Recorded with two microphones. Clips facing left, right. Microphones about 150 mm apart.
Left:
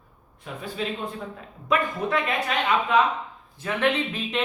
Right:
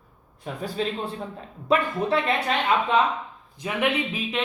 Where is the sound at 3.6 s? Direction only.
15° right (ahead or behind).